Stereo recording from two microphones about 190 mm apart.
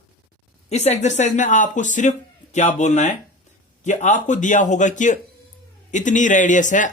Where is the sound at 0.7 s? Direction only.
35° left (ahead or behind).